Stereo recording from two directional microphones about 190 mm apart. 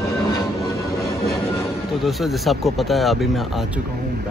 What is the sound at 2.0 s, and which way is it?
Speech, centre (ahead or behind).